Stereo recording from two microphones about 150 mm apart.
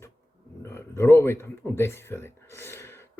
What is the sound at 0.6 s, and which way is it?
Speech, 15° left (ahead or behind).